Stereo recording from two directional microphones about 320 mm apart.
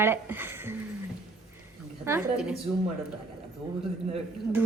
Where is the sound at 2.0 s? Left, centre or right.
Centre.